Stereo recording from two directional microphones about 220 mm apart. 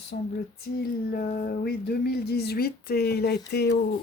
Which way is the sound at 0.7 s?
45° left (ahead or behind).